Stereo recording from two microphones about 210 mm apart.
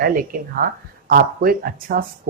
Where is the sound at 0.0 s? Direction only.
40° right (ahead or behind).